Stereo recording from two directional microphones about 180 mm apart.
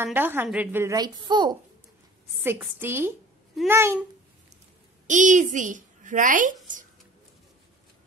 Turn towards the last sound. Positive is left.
turn(degrees=-45)  # may be behind; listen again after turning